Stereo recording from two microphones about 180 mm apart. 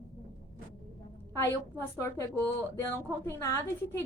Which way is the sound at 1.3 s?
15° left (ahead or behind).